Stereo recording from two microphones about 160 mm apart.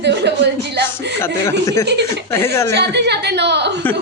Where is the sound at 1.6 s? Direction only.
20° left (ahead or behind).